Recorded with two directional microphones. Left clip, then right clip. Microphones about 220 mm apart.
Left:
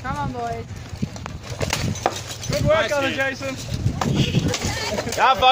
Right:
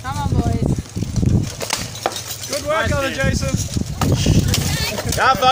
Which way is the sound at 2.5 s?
45° right (ahead or behind).